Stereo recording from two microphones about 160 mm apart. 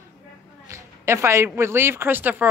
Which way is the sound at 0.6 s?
15° right (ahead or behind).